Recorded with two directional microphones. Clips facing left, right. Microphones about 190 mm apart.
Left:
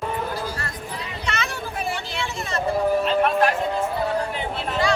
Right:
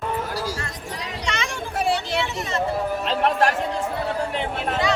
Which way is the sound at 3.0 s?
80° right.